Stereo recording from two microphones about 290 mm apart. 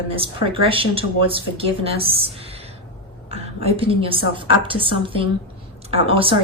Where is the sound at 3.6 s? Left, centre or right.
Centre.